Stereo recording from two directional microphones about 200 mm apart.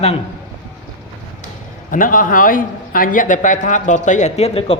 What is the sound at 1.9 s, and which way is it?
A man's voice, 45° left (ahead or behind).